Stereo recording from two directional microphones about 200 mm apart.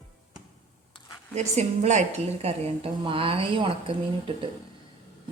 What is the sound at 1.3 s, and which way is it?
A woman's voice, 35° right (ahead or behind).